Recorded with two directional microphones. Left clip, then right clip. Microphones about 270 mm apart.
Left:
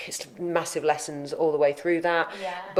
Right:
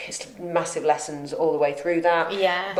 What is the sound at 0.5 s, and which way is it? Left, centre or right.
Speech, left.